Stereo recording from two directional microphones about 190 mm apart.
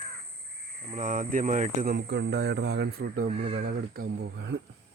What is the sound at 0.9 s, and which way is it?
Speech, 45° right (ahead or behind).